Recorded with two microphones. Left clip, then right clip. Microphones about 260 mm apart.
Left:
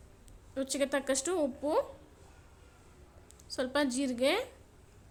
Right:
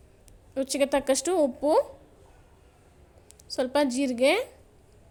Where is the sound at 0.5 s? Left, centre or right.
Centre.